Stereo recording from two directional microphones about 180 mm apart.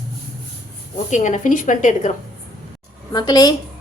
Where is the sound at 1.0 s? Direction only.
40° left (ahead or behind).